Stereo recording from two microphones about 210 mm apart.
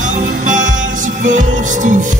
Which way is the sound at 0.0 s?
40° right (ahead or behind).